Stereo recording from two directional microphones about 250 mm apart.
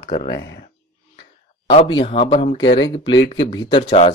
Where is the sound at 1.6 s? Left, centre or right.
Centre.